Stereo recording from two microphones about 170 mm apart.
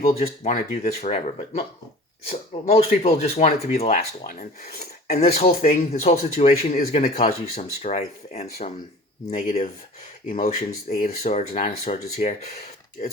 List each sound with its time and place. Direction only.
0.1 s speech: 40° left (ahead or behind)
5.5 s speech: 55° left (ahead or behind)